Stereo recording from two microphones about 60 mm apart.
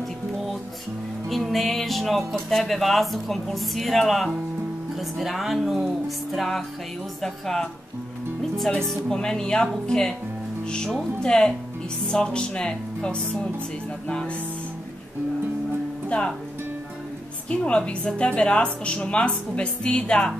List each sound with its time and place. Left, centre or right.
1.3 s music: centre
2.3 s a woman's voice: centre
16.1 s a woman's voice: centre
17.5 s a woman's voice: centre